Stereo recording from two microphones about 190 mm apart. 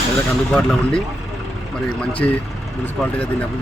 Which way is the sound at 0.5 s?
5° left (ahead or behind).